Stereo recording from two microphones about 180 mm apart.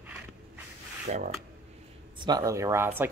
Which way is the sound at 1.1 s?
40° right (ahead or behind).